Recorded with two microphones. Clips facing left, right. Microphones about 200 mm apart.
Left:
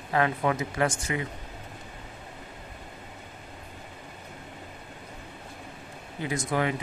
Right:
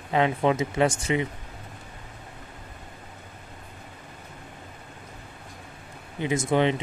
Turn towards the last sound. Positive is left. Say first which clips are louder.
# right 5 dB
turn(degrees=-25)  # may be behind; listen again after turning